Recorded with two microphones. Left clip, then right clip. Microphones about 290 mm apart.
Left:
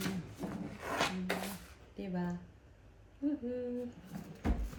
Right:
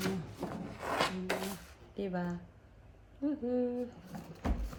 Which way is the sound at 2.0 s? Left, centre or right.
Right.